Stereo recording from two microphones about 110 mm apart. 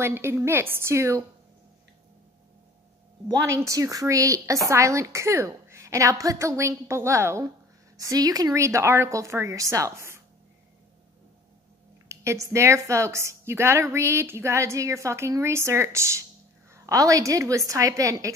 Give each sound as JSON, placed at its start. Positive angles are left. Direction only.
{"t": 0.0, "sound": "a woman's voice", "side_deg": -25}
{"t": 3.3, "sound": "a woman's voice", "side_deg": -30}
{"t": 12.1, "sound": "a woman's voice", "side_deg": -25}